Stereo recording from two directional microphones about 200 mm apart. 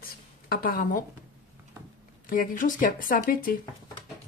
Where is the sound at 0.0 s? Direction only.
45° left (ahead or behind).